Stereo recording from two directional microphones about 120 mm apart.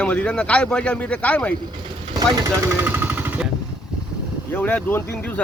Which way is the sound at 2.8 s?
15° right (ahead or behind).